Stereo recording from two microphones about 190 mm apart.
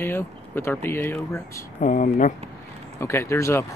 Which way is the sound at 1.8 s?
40° left (ahead or behind).